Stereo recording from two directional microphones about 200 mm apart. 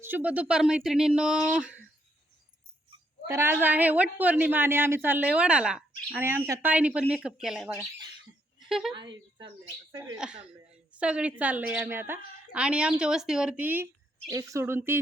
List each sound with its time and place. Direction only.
0.0 s speech: 10° right (ahead or behind)
3.2 s a woman's voice: 15° right (ahead or behind)
8.5 s a sound: centre (ahead or behind)
8.9 s a woman's voice: 25° right (ahead or behind)
10.2 s a woman's voice: 5° right (ahead or behind)